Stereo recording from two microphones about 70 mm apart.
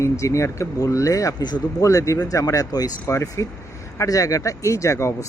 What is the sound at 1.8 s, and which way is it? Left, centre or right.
Speech, left.